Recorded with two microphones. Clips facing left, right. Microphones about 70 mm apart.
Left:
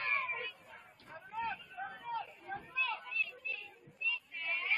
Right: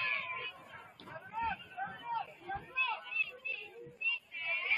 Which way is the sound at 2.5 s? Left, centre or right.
Centre.